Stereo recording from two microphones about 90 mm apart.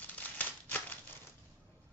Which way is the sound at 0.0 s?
20° left (ahead or behind).